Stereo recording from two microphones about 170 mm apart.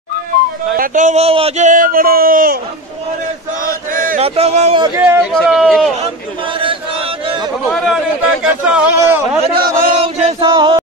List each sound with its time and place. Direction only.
0.7 s speech: 50° right (ahead or behind)
1.7 s a man's voice: 55° right (ahead or behind)
3.6 s chant: 55° right (ahead or behind)
4.2 s speech: 40° right (ahead or behind)
4.9 s speech: 10° right (ahead or behind)
5.3 s speech: centre (ahead or behind)
7.7 s speech: centre (ahead or behind)
9.9 s chant: 40° right (ahead or behind)
10.4 s a sound: 25° right (ahead or behind)